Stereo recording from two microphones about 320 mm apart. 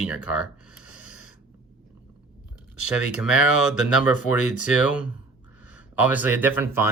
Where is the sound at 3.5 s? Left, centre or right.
Left.